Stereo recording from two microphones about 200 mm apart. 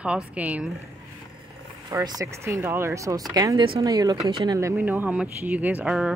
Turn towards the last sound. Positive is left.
turn(degrees=-5)  # may be behind; listen again after turning